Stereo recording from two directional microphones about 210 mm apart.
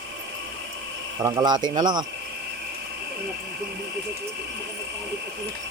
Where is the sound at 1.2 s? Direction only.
20° right (ahead or behind).